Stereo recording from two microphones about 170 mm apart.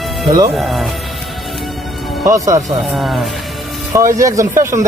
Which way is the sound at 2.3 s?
20° right (ahead or behind).